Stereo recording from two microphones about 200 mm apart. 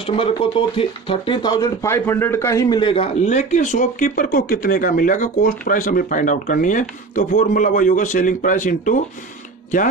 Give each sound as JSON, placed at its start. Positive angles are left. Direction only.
{"t": 0.0, "sound": "speech", "side_deg": 30}